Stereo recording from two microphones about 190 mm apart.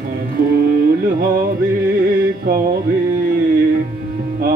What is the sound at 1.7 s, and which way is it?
Music, 50° right (ahead or behind).